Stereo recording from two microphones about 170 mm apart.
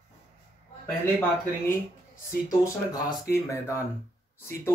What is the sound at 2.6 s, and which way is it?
Speech, 15° left (ahead or behind).